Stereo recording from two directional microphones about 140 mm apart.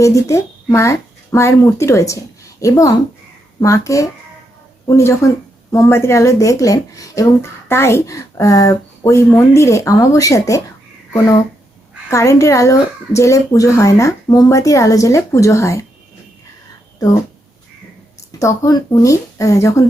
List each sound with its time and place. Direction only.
0.0 s speech: 25° left (ahead or behind)
12.1 s speech: 20° left (ahead or behind)
18.3 s speech: 25° left (ahead or behind)